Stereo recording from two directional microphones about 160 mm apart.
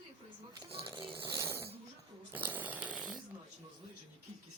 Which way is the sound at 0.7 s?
20° right (ahead or behind).